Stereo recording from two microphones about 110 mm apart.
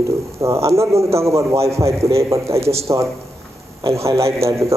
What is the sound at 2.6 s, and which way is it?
Speech, 70° right (ahead or behind).